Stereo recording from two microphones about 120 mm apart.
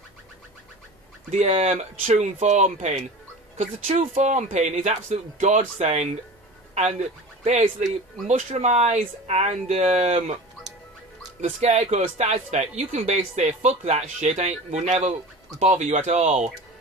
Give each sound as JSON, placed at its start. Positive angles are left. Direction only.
{"t": 1.3, "sound": "speech", "side_deg": -65}
{"t": 11.4, "sound": "speech", "side_deg": -65}